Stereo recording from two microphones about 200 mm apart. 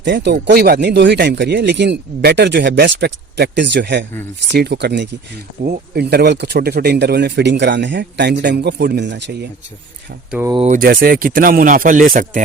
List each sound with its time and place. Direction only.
0.0 s speech: 60° right (ahead or behind)
10.7 s speech: 45° right (ahead or behind)